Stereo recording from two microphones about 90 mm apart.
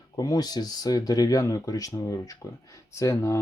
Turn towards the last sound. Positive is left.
turn(degrees=35)  # may be behind; listen again after turning